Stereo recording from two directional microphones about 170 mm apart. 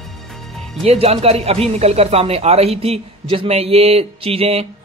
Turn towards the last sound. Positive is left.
turn(degrees=-35)  # may be behind; listen again after turning